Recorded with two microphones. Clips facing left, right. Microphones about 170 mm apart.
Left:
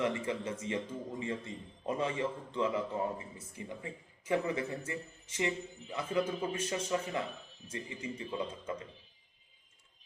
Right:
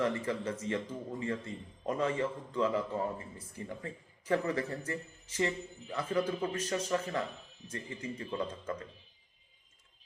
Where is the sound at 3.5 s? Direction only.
15° left (ahead or behind).